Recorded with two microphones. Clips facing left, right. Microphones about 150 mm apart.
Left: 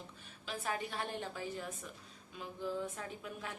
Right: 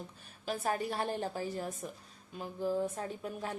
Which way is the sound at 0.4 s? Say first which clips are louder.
Right 6 dB; 40° right (ahead or behind).